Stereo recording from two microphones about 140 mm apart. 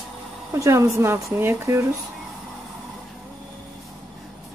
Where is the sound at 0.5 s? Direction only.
20° right (ahead or behind).